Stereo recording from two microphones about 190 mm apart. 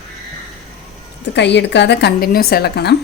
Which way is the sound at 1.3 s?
65° left (ahead or behind).